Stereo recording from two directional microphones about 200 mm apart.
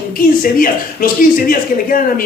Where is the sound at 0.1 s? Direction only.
45° left (ahead or behind).